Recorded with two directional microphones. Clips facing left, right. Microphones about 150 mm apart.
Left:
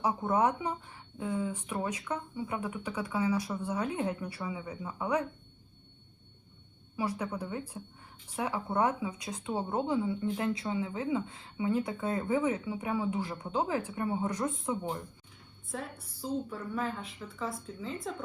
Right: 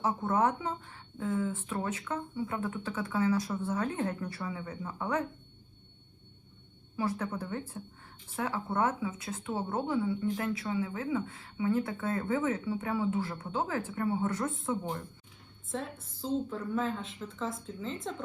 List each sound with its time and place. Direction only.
0.0 s speech: 15° left (ahead or behind)
6.9 s speech: 10° left (ahead or behind)
16.0 s a woman's voice: 20° right (ahead or behind)
16.5 s speech: 5° left (ahead or behind)